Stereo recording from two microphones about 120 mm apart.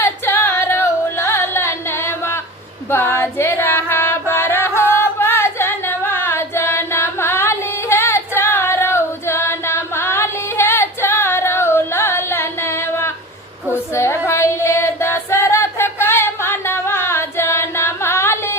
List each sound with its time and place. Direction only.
0.0 s singing: 20° left (ahead or behind)
2.9 s female singing: 20° left (ahead or behind)
5.2 s singing: 20° left (ahead or behind)
13.9 s female singing: 20° left (ahead or behind)